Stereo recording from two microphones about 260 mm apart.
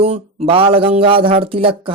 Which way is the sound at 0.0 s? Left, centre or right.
Right.